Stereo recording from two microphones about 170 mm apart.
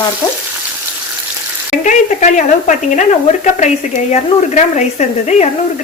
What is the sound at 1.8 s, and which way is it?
Speech, 45° left (ahead or behind).